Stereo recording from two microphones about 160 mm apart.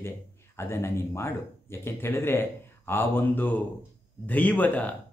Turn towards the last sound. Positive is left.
turn(degrees=10)  # may be behind; listen again after turning